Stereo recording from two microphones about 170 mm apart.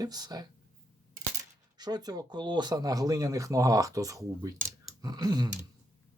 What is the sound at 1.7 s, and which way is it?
Speech, 25° right (ahead or behind).